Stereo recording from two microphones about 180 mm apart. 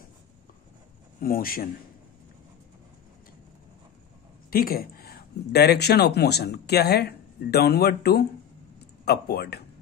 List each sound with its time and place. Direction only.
1.2 s a man's voice: 55° left (ahead or behind)
4.5 s speech: 55° left (ahead or behind)